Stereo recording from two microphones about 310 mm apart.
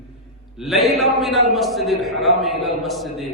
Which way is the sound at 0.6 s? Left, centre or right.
Centre.